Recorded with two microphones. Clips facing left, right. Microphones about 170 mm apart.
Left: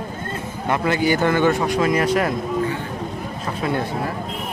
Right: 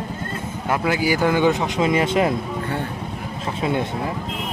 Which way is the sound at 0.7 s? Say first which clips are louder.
Left 1 dB; 5° right (ahead or behind).